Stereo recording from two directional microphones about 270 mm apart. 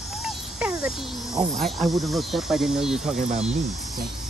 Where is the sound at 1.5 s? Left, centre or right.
Centre.